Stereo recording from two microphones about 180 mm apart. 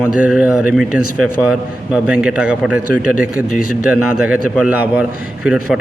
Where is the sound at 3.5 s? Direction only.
50° left (ahead or behind).